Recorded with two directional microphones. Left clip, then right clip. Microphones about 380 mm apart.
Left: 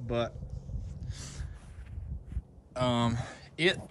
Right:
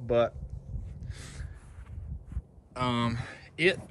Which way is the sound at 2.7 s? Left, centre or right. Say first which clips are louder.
Left 1 dB; centre.